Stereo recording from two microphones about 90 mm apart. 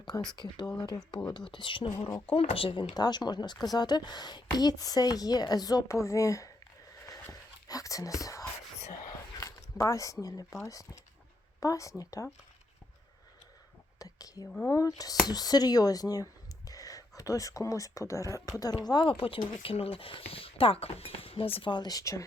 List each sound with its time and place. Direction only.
0.3 s a woman's voice: 50° left (ahead or behind)
2.3 s speech: 90° left
2.9 s a woman's voice: 50° left (ahead or behind)
7.7 s whispering: 40° left (ahead or behind)
11.6 s speech: 40° left (ahead or behind)
14.0 s whispering: 40° left (ahead or behind)
14.7 s speech: 40° left (ahead or behind)